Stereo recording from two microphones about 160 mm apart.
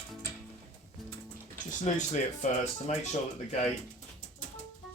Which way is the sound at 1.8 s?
50° left (ahead or behind).